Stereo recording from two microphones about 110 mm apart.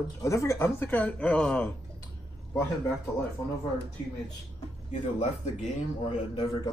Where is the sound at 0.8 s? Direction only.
15° left (ahead or behind).